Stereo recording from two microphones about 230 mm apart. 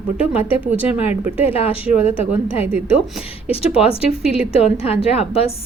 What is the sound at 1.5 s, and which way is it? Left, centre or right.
A woman's voice, left.